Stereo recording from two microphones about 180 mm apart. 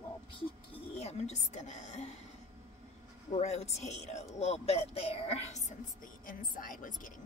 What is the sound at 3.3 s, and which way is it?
Speech, 35° left (ahead or behind).